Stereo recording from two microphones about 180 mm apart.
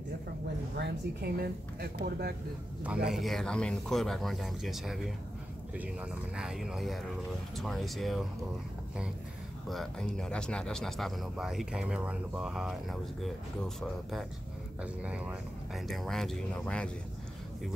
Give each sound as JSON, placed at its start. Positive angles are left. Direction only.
{"t": 0.7, "sound": "speech", "side_deg": -65}
{"t": 2.8, "sound": "speech", "side_deg": -5}
{"t": 9.7, "sound": "speech", "side_deg": 0}
{"t": 14.8, "sound": "speech", "side_deg": -5}